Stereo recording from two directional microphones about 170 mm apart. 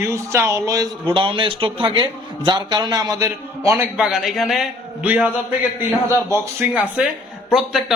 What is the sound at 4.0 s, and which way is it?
A man's voice, centre (ahead or behind).